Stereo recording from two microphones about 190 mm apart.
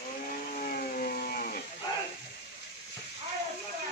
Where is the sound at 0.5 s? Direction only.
50° left (ahead or behind).